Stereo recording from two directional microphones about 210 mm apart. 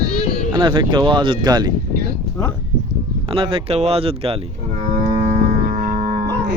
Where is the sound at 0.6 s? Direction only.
25° right (ahead or behind).